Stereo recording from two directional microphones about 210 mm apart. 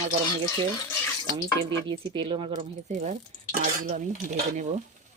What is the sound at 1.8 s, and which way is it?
Speech, 25° right (ahead or behind).